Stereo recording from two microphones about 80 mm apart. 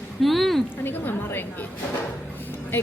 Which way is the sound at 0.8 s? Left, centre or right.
Left.